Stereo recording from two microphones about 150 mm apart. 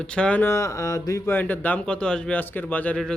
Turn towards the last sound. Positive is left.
turn(degrees=5)  # may be behind; listen again after turning